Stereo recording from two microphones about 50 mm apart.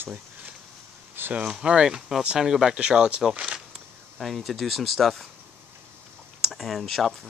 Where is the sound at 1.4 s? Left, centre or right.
Centre.